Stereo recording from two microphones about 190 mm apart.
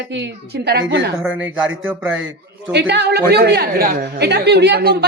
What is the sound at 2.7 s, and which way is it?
A woman's voice, 65° right (ahead or behind).